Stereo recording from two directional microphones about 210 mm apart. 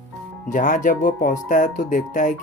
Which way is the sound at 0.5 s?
35° left (ahead or behind).